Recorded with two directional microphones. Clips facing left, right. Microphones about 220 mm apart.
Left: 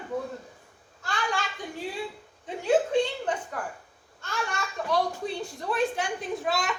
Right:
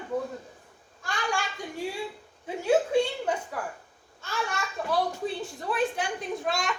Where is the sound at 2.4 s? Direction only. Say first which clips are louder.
Even; 10° right (ahead or behind).